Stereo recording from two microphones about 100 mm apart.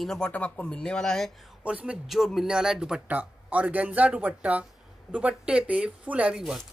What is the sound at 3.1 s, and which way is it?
Speech, 15° right (ahead or behind).